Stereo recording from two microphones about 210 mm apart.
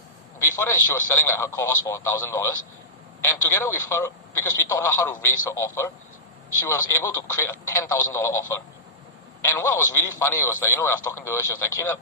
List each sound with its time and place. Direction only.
0.3 s speech: 15° left (ahead or behind)